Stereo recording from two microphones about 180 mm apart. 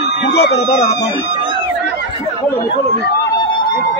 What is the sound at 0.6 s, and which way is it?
Speech, 35° left (ahead or behind).